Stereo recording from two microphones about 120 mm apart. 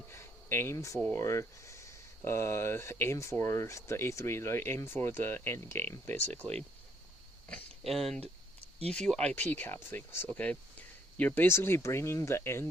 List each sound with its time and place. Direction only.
0.1 s a sound: 20° left (ahead or behind)
1.1 s speech: 25° left (ahead or behind)
7.9 s speech: centre (ahead or behind); by 12.6 s 20° left (ahead or behind)